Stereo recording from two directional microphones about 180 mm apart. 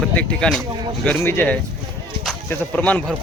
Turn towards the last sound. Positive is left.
turn(degrees=5)  # may be behind; listen again after turning